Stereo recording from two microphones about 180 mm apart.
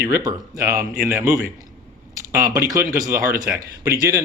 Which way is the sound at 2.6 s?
20° right (ahead or behind).